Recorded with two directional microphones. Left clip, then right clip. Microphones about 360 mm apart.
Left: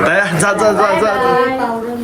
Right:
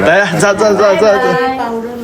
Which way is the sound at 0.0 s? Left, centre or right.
Centre.